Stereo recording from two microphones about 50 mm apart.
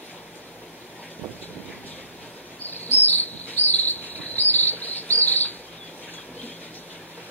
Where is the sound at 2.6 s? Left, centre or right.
Left.